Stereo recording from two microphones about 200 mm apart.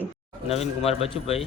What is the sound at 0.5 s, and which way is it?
Speech, 30° left (ahead or behind).